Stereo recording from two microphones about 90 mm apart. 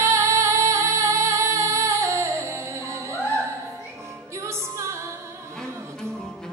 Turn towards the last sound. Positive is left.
turn(degrees=-35)  # may be behind; listen again after turning